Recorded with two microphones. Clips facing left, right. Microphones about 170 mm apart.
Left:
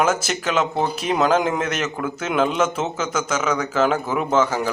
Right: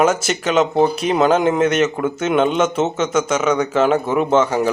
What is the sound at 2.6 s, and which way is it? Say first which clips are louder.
Speech: right 4 dB; 30° right (ahead or behind).